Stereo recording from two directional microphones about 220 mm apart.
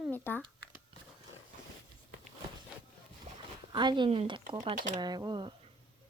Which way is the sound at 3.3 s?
30° right (ahead or behind).